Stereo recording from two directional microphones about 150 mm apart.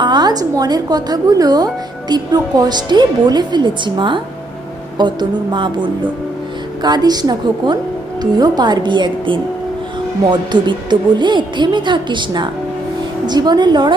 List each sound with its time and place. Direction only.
0.0 s a woman's voice: 30° right (ahead or behind)